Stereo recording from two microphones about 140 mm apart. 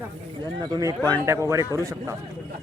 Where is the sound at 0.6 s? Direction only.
25° right (ahead or behind).